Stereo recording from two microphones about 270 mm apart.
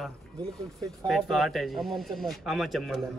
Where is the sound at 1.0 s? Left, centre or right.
Centre.